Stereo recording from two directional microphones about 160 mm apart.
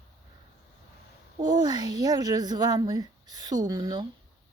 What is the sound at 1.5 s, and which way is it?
A woman's voice, 25° right (ahead or behind).